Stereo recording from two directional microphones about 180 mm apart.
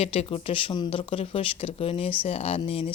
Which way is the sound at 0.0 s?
35° left (ahead or behind).